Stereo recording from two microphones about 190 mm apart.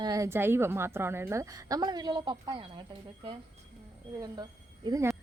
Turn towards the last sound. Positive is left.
turn(degrees=-15)  # may be behind; listen again after turning